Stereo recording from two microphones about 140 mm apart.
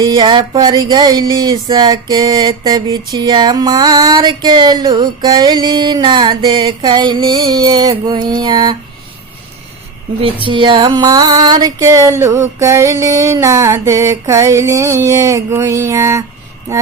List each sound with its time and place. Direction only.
0.0 s music: 30° right (ahead or behind)
10.4 s music: 35° right (ahead or behind)